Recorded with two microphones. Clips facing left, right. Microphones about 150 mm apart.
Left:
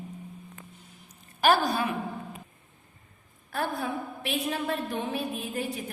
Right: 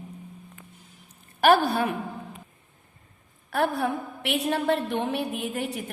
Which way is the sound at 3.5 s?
75° right (ahead or behind).